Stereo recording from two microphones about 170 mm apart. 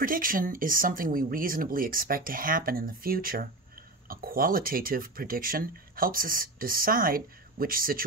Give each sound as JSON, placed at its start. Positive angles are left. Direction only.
{"t": 0.0, "sound": "speech", "side_deg": -55}